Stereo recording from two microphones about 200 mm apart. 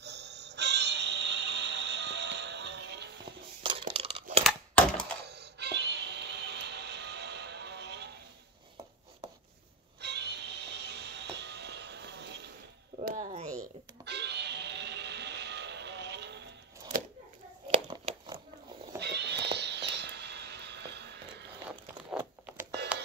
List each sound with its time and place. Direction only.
0.0 s music: 60° right (ahead or behind)
3.6 s crumpling: 30° right (ahead or behind)
4.5 s a sound: 5° left (ahead or behind)
5.3 s music: 55° right (ahead or behind)
9.9 s music: 55° right (ahead or behind)
13.0 s a sound: 40° right (ahead or behind)
14.0 s music: 55° right (ahead or behind)
17.8 s a sound: 25° right (ahead or behind)
18.9 s music: 55° right (ahead or behind)